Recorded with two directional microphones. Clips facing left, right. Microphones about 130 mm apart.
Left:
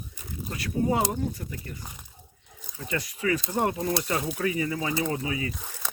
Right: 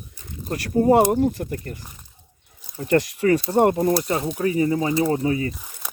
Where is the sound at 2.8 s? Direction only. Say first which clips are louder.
Right 10 dB; 55° right (ahead or behind).